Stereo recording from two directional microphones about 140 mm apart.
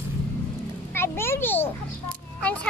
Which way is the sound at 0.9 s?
15° left (ahead or behind).